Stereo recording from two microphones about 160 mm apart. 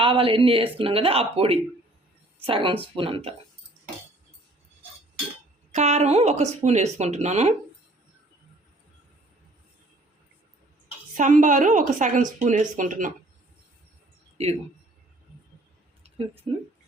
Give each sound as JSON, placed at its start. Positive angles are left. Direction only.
{"t": 0.0, "sound": "speech", "side_deg": -35}
{"t": 5.7, "sound": "a woman's voice", "side_deg": -45}
{"t": 11.1, "sound": "a woman's voice", "side_deg": -55}